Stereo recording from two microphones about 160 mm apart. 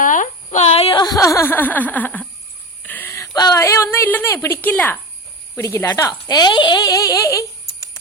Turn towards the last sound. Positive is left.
turn(degrees=20)  # may be behind; listen again after turning